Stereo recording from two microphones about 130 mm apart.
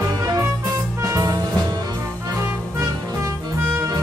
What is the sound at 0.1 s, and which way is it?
Music, 30° right (ahead or behind).